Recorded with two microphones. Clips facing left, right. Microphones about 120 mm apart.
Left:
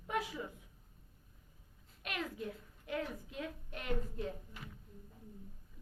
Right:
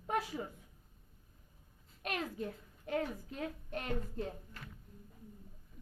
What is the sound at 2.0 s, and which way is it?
A child's voice, 40° right (ahead or behind).